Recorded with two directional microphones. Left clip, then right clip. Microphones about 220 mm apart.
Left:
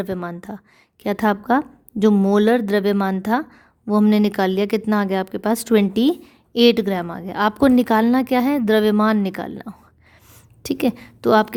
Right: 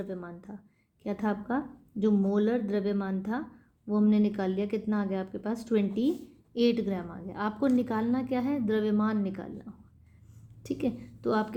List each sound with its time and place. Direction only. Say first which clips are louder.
0.0 s a woman's voice: left 12 dB; 50° left (ahead or behind)